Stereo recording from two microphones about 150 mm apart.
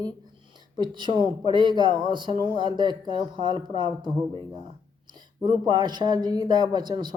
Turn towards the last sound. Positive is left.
turn(degrees=-30)  # may be behind; listen again after turning